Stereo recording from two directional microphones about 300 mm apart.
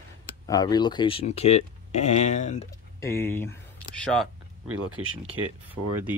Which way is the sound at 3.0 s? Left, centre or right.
Centre.